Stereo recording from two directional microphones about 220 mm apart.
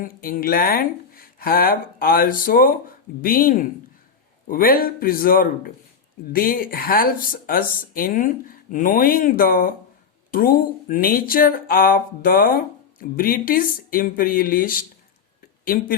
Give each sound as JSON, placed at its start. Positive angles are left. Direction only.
{"t": 0.0, "sound": "speech", "side_deg": 40}